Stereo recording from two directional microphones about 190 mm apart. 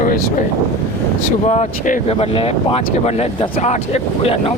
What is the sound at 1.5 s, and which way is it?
Speech, 40° left (ahead or behind).